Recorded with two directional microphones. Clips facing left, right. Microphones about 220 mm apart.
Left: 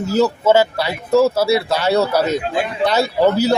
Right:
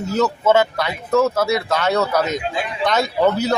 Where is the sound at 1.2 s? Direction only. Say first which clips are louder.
Left 3 dB; 30° left (ahead or behind).